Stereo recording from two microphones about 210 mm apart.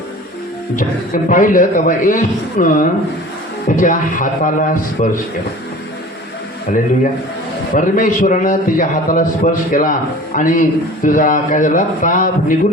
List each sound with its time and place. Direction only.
0.8 s a man's voice: 40° left (ahead or behind)
6.7 s a man's voice: 40° left (ahead or behind)